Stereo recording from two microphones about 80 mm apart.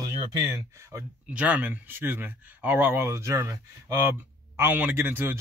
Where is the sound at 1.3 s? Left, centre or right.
Centre; by 4.1 s right.